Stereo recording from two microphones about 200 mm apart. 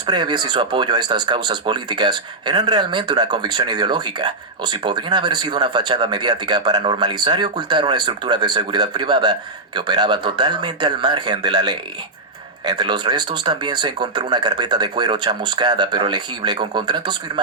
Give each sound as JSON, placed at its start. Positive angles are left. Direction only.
{"t": 0.0, "sound": "speech", "side_deg": -20}